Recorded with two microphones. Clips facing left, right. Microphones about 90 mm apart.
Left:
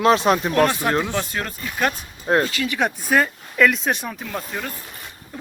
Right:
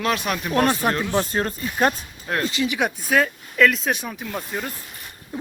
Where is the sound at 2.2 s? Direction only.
30° left (ahead or behind).